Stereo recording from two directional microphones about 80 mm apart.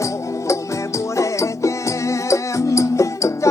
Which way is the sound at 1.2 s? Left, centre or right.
Left.